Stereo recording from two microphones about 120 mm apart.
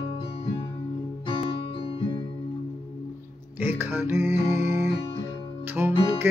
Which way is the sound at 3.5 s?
20° right (ahead or behind).